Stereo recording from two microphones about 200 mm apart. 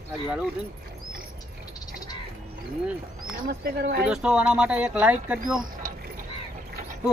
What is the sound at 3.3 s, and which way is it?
Speech, 50° right (ahead or behind).